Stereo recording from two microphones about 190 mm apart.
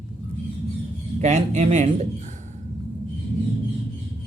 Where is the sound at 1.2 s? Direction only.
35° right (ahead or behind).